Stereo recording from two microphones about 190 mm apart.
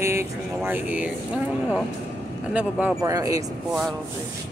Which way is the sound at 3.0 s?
15° right (ahead or behind).